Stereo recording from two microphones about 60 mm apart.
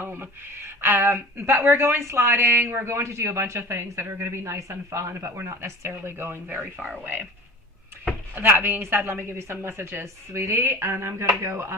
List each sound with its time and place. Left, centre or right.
0.0 s speech: right
6.6 s speech: right
8.4 s speech: right